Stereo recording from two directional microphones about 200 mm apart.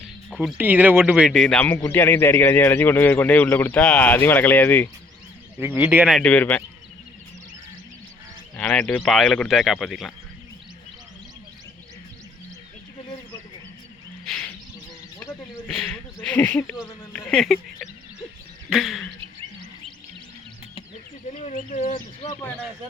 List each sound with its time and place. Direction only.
0.3 s speech: 5° right (ahead or behind)
5.5 s speech: 10° right (ahead or behind)
6.1 s speech: 5° left (ahead or behind)
8.5 s speech: 5° left (ahead or behind)
14.3 s bird: 5° left (ahead or behind)
15.2 s wild animals: 5° left (ahead or behind)
15.8 s a sound: 5° left (ahead or behind)
18.7 s speech: centre (ahead or behind)
21.4 s speech: 35° left (ahead or behind)
22.3 s speech: 10° left (ahead or behind)